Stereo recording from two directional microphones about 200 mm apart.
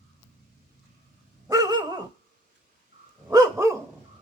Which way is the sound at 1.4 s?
20° right (ahead or behind).